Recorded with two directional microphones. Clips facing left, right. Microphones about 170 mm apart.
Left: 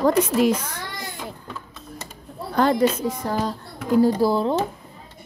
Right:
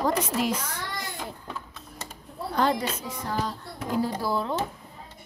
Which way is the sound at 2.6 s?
50° left (ahead or behind).